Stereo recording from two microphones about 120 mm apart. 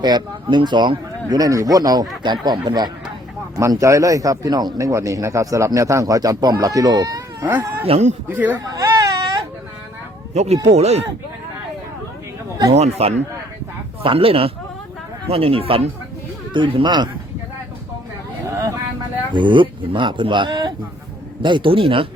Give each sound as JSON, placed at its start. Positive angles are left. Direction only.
{"t": 0.5, "sound": "speech", "side_deg": -40}
{"t": 7.4, "sound": "speech", "side_deg": -15}
{"t": 7.9, "sound": "speech", "side_deg": -60}
{"t": 8.3, "sound": "speech", "side_deg": -15}
{"t": 8.5, "sound": "baby cry", "side_deg": -30}
{"t": 10.3, "sound": "speech", "side_deg": -65}
{"t": 12.7, "sound": "speech", "side_deg": -60}
{"t": 14.0, "sound": "speech", "side_deg": -50}
{"t": 18.4, "sound": "vehicle", "side_deg": -25}
{"t": 19.3, "sound": "speech", "side_deg": -40}